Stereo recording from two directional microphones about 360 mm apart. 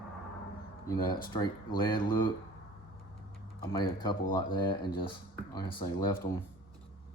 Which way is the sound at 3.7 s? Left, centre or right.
Centre.